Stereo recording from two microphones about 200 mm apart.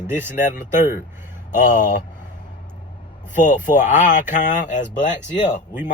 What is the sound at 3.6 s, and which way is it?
Speech, 40° left (ahead or behind).